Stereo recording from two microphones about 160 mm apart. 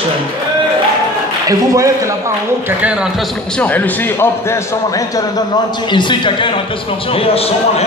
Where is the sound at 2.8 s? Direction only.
5° right (ahead or behind).